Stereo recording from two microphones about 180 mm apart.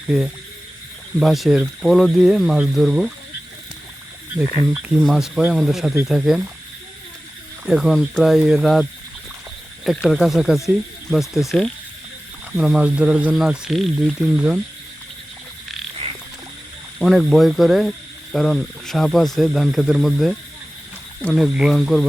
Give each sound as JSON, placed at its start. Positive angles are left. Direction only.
{"t": 1.2, "sound": "speech", "side_deg": 0}
{"t": 4.7, "sound": "speech", "side_deg": 0}
{"t": 7.6, "sound": "speech", "side_deg": 0}
{"t": 16.0, "sound": "frog", "side_deg": -35}
{"t": 17.0, "sound": "speech", "side_deg": 0}